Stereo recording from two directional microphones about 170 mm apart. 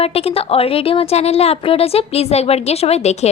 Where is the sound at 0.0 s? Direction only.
35° left (ahead or behind).